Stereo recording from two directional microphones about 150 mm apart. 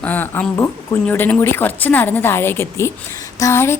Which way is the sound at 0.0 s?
10° left (ahead or behind).